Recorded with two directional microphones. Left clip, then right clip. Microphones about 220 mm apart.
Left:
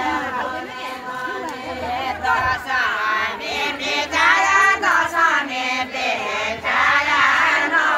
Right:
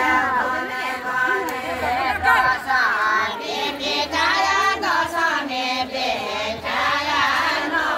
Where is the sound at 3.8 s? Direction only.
20° right (ahead or behind).